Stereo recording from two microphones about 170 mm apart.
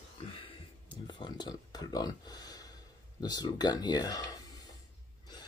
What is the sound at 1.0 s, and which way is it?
Speech, 25° left (ahead or behind).